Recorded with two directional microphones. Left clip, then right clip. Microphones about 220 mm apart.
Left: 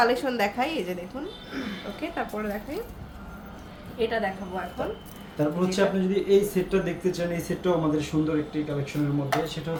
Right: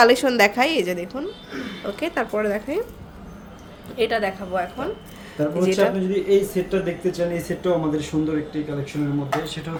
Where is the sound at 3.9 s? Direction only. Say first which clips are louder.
Right 5 dB; 45° right (ahead or behind).